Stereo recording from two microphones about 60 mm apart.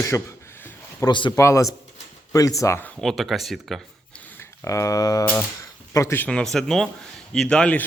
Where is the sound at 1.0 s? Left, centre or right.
Left.